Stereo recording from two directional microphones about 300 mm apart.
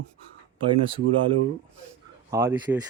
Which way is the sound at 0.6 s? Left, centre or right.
Centre.